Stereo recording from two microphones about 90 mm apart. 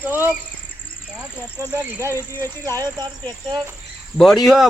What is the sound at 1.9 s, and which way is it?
Speech, 30° right (ahead or behind).